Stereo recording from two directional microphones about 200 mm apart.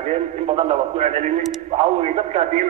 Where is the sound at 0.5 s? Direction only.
30° right (ahead or behind).